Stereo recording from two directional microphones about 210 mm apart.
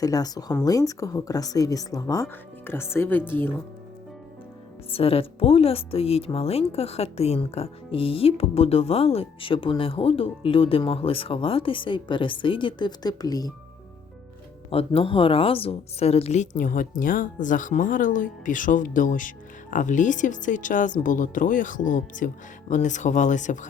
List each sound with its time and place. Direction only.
0.0 s speech: 15° left (ahead or behind)
4.9 s speech: 25° left (ahead or behind)
14.7 s a woman's voice: 25° left (ahead or behind)